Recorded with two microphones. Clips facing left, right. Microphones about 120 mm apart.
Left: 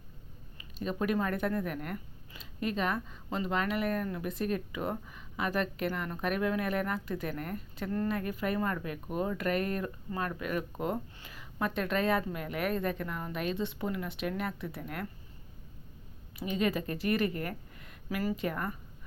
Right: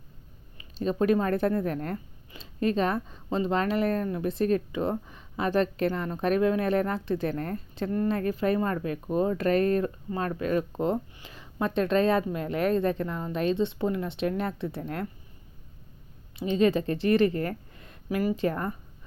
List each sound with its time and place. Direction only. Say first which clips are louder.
0.8 s speech: right 7 dB; 30° right (ahead or behind)
16.4 s a woman's voice: right 7 dB; 25° right (ahead or behind)